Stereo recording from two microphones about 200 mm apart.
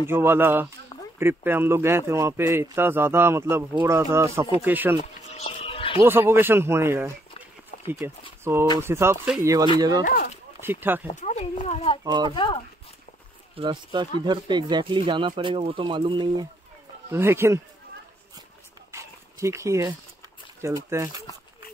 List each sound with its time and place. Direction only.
0.0 s a man's voice: 10° right (ahead or behind)
5.3 s a sound: 30° left (ahead or behind)
6.0 s a man's voice: 10° right (ahead or behind)
10.0 s speech: 50° left (ahead or behind)
10.6 s a man's voice: 10° right (ahead or behind)
11.1 s speech: 35° left (ahead or behind)
12.0 s speech: 20° right (ahead or behind)
12.4 s speech: 25° left (ahead or behind)
13.6 s speech: 25° right (ahead or behind)
17.1 s a man's voice: 10° right (ahead or behind)
18.9 s dog: 15° right (ahead or behind)
20.6 s a man's voice: 15° right (ahead or behind)